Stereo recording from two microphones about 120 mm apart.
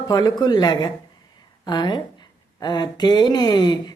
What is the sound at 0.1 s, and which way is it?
A woman's voice, 35° left (ahead or behind).